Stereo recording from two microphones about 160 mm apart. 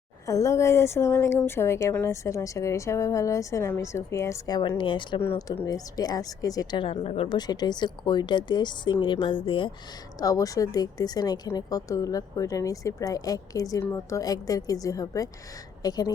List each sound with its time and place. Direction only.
0.3 s a woman's voice: 20° left (ahead or behind)
4.8 s a woman's voice: 30° left (ahead or behind)
7.3 s a woman's voice: 25° left (ahead or behind)
10.2 s a woman's voice: 20° left (ahead or behind)